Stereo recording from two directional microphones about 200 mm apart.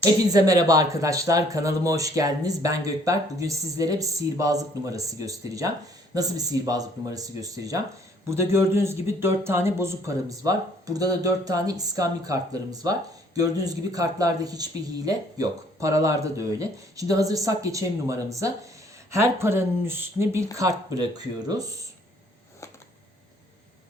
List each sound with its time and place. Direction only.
0.0 s a man's voice: 20° right (ahead or behind)